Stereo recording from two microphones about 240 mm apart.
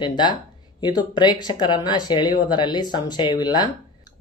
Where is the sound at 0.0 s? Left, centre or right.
Centre.